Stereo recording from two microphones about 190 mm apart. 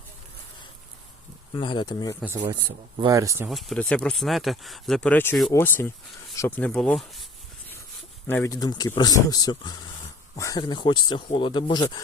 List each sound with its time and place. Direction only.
1.5 s speech: 25° left (ahead or behind)
2.2 s speech: 15° right (ahead or behind)
3.5 s speech: 5° left (ahead or behind)
6.7 s speech: 5° left (ahead or behind)
8.3 s speech: 15° left (ahead or behind)